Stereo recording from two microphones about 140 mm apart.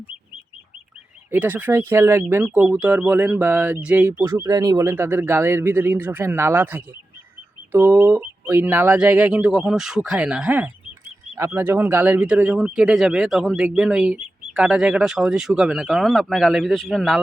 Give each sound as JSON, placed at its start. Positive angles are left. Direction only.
{"t": 1.3, "sound": "speech", "side_deg": -10}
{"t": 4.9, "sound": "speech", "side_deg": -15}